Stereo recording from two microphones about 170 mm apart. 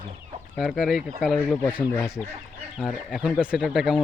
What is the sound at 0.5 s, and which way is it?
Chicken, centre (ahead or behind).